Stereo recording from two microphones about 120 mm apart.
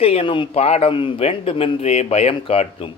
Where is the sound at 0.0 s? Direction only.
55° left (ahead or behind).